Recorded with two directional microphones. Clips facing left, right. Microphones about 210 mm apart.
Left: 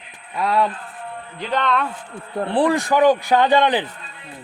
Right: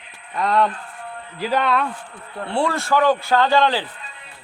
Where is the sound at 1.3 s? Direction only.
5° right (ahead or behind).